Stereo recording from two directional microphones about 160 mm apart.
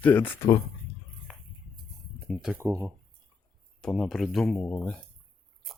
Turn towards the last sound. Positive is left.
turn(degrees=10)  # may be behind; listen again after turning